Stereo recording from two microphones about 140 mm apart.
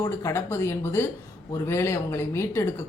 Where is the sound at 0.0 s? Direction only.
20° left (ahead or behind).